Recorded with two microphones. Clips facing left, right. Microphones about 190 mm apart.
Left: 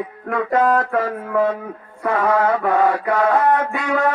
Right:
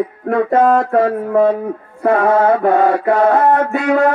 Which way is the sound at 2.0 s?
30° right (ahead or behind).